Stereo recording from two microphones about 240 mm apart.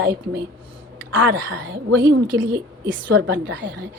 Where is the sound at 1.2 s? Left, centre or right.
Right.